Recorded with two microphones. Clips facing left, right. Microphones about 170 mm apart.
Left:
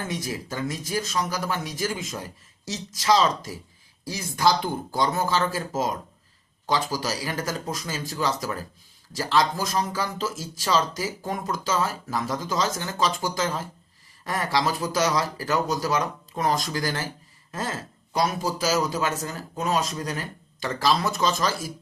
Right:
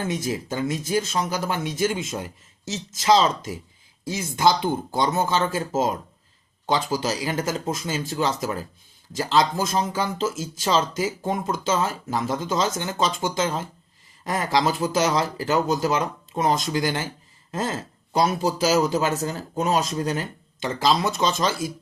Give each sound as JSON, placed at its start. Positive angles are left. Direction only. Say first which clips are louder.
{"t": 0.1, "sound": "speech", "louder": "right 4 dB", "side_deg": -25}